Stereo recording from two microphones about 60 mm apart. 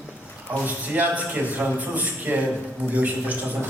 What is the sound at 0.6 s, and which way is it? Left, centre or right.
A man's voice, right.